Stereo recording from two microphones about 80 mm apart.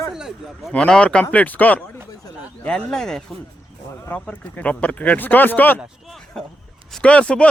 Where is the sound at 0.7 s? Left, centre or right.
Centre.